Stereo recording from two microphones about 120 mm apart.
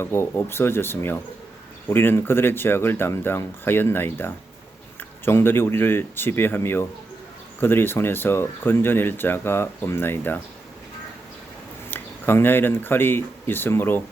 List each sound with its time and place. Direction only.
0.0 s speech: 20° left (ahead or behind)
11.9 s speech: 15° left (ahead or behind)